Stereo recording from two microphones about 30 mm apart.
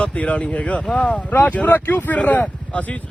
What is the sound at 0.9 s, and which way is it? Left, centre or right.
Speech, centre.